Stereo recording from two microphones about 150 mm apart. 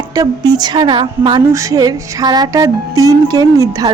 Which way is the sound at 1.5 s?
20° right (ahead or behind).